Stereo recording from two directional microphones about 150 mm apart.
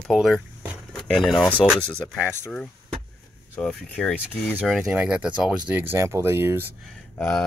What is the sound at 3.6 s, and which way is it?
Speech, 5° left (ahead or behind).